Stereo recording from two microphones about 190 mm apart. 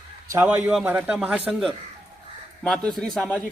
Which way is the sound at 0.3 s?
10° right (ahead or behind).